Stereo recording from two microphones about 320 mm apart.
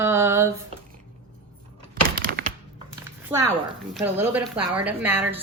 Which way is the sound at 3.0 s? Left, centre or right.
Centre.